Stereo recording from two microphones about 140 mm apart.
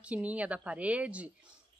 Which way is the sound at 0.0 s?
10° right (ahead or behind).